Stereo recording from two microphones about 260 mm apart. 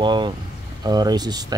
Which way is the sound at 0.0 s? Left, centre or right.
Centre.